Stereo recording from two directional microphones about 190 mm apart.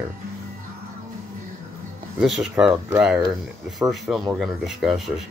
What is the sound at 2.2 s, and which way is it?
Speech, 5° right (ahead or behind).